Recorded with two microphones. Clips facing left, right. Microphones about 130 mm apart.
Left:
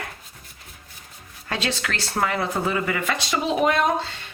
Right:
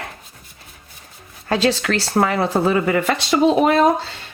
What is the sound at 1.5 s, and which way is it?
Speech, 35° right (ahead or behind).